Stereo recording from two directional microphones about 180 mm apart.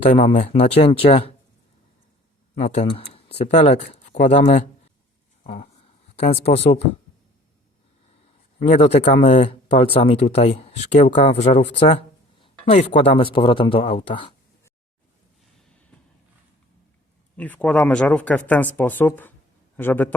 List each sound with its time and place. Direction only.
0.0 s speech: 35° left (ahead or behind)
2.6 s speech: 40° left (ahead or behind)
5.4 s a sound: 30° left (ahead or behind)
6.1 s speech: 35° left (ahead or behind)
8.5 s speech: 35° left (ahead or behind)
17.3 s speech: 10° left (ahead or behind)